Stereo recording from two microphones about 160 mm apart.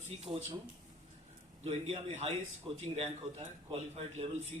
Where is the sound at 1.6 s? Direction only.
35° right (ahead or behind).